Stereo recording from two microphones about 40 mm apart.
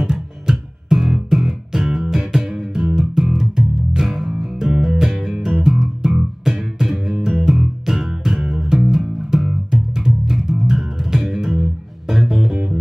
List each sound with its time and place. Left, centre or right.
0.0 s music: centre